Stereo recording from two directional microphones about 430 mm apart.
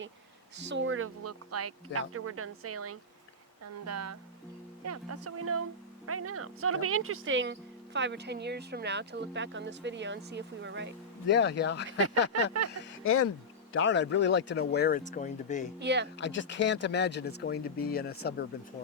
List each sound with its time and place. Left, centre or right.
0.6 s speech: right
11.3 s speech: left
13.1 s speech: left; by 15.7 s centre
15.8 s speech: right
16.2 s speech: left